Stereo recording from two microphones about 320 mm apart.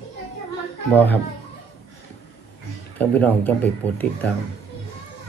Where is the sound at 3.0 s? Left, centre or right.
Centre.